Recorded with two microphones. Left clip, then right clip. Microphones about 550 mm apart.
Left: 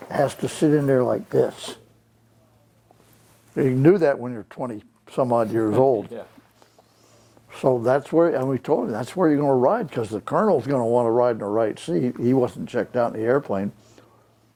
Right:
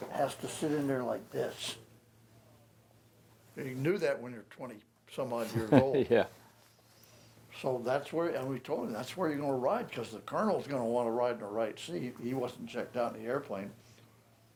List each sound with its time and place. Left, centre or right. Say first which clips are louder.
0.1 s speech: left 12 dB; left
3.5 s speech: left 17 dB; left
7.5 s speech: left 13 dB; left